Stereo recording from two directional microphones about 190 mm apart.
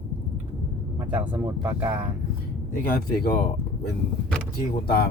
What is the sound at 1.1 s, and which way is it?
Speech, 5° right (ahead or behind).